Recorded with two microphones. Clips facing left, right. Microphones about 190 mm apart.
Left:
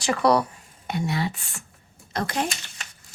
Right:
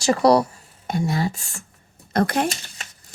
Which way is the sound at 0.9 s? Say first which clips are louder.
Right 3 dB; 45° right (ahead or behind).